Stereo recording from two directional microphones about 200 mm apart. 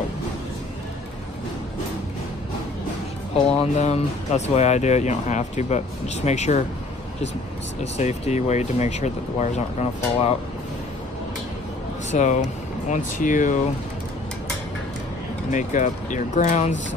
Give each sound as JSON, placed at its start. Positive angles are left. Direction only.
{"t": 3.4, "sound": "speech", "side_deg": 35}
{"t": 7.8, "sound": "speech", "side_deg": 35}
{"t": 12.1, "sound": "speech", "side_deg": 35}
{"t": 15.5, "sound": "speech", "side_deg": 40}